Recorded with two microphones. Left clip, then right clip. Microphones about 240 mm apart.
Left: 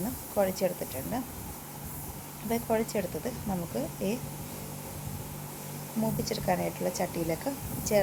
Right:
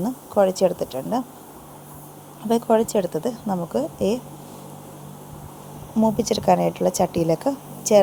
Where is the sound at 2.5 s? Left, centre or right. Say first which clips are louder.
Right 11 dB; right.